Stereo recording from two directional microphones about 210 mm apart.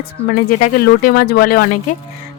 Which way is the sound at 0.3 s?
40° left (ahead or behind).